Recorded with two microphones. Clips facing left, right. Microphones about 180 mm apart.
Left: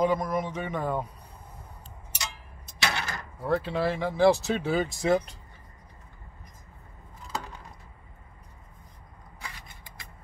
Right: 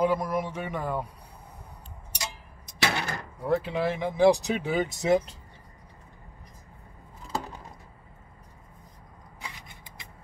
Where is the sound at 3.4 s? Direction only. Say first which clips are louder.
Even; 15° right (ahead or behind).